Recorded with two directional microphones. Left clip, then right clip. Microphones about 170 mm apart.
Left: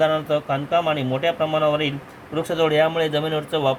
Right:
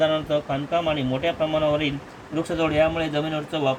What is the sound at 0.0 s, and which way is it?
Speech, 30° left (ahead or behind).